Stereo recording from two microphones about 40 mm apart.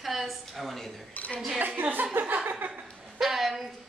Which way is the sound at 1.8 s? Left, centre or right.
Right.